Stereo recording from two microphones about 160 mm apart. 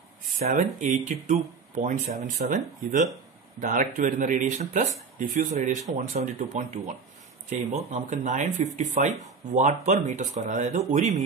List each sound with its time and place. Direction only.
0.4 s speech: 50° right (ahead or behind)